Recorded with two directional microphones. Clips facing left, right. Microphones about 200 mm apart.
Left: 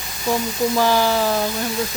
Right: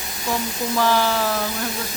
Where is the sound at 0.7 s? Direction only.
15° left (ahead or behind).